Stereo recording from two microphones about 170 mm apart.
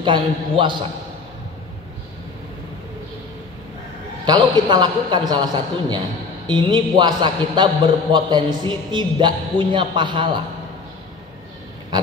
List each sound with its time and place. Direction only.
0.0 s a man's voice: 30° right (ahead or behind)
4.3 s a man's voice: 25° right (ahead or behind)